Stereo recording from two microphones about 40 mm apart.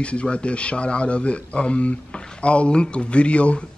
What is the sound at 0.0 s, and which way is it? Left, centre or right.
A man's voice, left.